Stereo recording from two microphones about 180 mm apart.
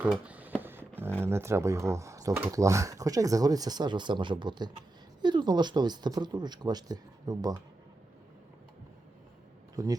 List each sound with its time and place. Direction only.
0.0 s a sound: 10° right (ahead or behind)
1.2 s speech: 15° right (ahead or behind)
9.7 s speech: 20° right (ahead or behind)